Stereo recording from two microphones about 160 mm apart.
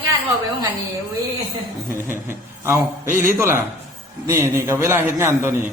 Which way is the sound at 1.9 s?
15° right (ahead or behind).